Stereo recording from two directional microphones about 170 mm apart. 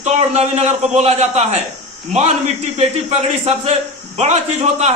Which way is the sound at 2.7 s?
40° right (ahead or behind).